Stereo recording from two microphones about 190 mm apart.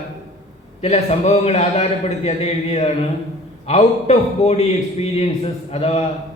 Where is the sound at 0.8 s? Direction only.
35° left (ahead or behind).